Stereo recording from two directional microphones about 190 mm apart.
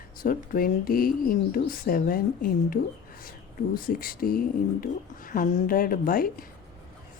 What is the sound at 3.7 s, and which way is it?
Speech, 50° left (ahead or behind).